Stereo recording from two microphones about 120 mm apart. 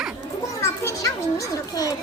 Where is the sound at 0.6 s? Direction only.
25° left (ahead or behind).